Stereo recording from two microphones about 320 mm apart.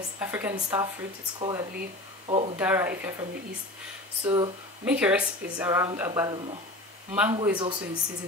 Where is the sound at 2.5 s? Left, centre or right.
Centre.